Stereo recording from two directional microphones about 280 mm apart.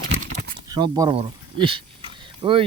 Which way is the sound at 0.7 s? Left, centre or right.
Centre.